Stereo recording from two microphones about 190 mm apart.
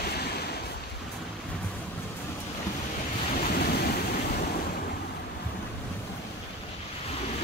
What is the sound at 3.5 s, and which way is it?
Waves, 55° left (ahead or behind).